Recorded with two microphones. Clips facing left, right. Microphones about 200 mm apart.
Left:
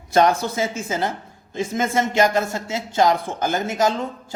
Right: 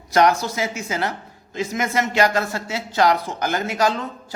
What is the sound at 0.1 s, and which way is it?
Speech, 25° left (ahead or behind).